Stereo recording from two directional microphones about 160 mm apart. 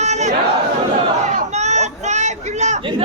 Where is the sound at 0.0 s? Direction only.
45° right (ahead or behind).